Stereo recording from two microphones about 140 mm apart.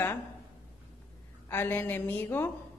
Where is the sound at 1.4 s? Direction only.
15° left (ahead or behind).